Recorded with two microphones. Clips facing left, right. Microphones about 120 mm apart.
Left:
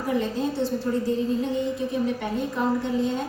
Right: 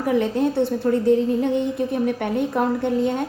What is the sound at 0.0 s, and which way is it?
A woman's voice, 65° right (ahead or behind).